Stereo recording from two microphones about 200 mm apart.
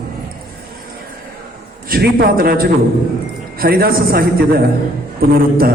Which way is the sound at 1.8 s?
45° right (ahead or behind).